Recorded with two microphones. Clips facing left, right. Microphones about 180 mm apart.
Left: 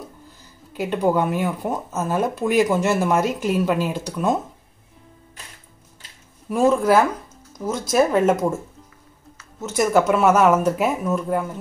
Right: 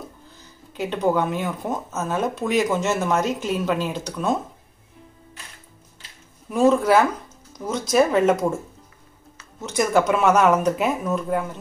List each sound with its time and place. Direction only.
0.7 s speech: 10° left (ahead or behind)
6.5 s speech: 5° left (ahead or behind)
9.6 s speech: 5° left (ahead or behind)